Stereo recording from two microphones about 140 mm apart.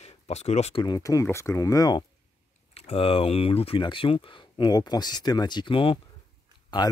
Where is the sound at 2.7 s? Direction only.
40° left (ahead or behind).